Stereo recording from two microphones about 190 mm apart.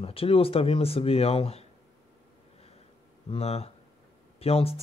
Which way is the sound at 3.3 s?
30° left (ahead or behind).